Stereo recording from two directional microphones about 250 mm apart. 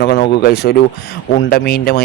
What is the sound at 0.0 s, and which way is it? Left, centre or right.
Speech, left.